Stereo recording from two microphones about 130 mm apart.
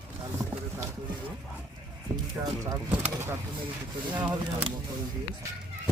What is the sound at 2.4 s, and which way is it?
Speech, 30° right (ahead or behind).